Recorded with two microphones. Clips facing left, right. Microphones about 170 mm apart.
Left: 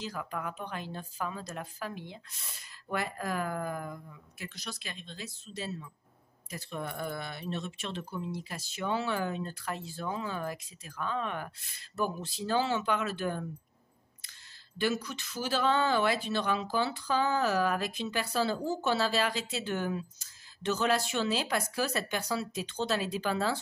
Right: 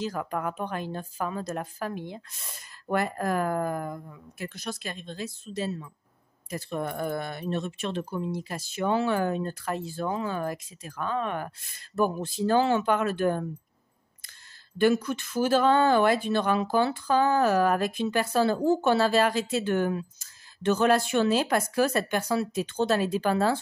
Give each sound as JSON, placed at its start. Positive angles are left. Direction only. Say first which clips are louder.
{"t": 0.0, "sound": "speech", "louder": "right 7 dB", "side_deg": -50}
{"t": 14.8, "sound": "speech", "louder": "right 9 dB", "side_deg": -55}